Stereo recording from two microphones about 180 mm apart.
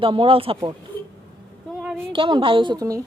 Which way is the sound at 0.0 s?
30° right (ahead or behind).